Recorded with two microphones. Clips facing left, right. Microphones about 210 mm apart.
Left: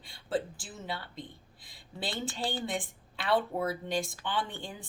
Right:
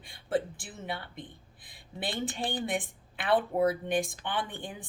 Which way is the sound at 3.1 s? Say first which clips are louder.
Right 2 dB; 55° right (ahead or behind).